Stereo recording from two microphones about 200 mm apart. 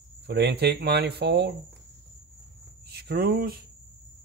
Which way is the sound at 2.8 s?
55° right (ahead or behind).